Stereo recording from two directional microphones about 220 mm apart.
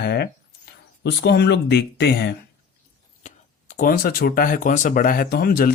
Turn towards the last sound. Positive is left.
turn(degrees=40)  # may be behind; listen again after turning